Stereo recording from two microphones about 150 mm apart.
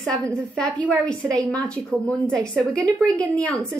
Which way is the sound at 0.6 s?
5° left (ahead or behind).